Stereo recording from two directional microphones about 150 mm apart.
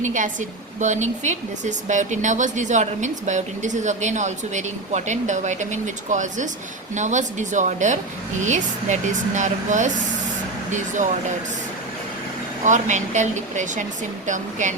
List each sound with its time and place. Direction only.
0.0 s a woman's voice: 55° right (ahead or behind)
12.6 s speech: 55° right (ahead or behind)